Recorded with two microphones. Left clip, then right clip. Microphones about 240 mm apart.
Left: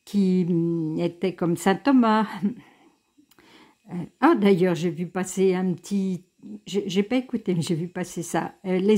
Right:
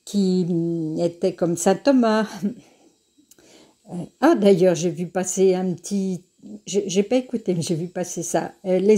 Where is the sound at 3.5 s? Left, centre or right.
Centre.